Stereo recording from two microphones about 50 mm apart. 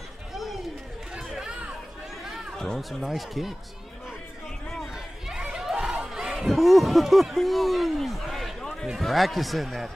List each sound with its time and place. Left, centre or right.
0.3 s chatter: centre
1.4 s chatter: right
2.5 s speech: centre
3.0 s speech: centre
4.9 s chatter: centre
5.7 s speech: centre